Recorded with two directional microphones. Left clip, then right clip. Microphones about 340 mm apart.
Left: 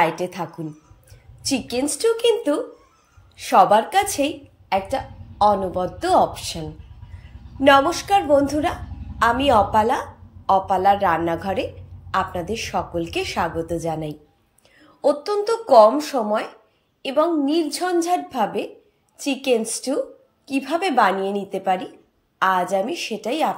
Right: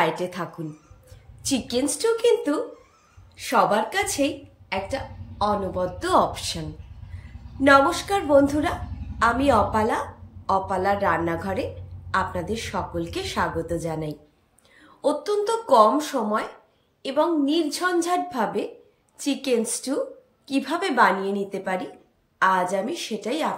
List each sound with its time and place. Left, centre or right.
0.2 s a woman's voice: centre
1.7 s a woman's voice: centre
7.6 s a woman's voice: centre